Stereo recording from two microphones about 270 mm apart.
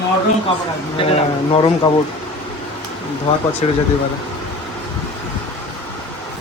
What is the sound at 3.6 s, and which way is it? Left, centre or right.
Speech, left.